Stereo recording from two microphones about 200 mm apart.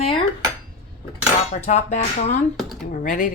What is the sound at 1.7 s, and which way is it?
Speech, 35° left (ahead or behind).